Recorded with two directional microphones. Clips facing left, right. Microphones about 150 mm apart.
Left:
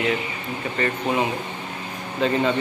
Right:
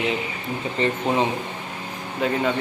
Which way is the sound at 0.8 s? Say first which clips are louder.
Right 1 dB; 20° right (ahead or behind).